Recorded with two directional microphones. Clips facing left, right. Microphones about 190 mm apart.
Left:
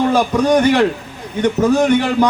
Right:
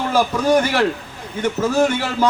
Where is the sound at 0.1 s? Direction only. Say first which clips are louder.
Left 3 dB; 15° left (ahead or behind).